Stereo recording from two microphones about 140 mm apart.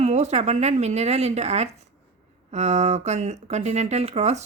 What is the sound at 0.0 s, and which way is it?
Speech, 55° right (ahead or behind).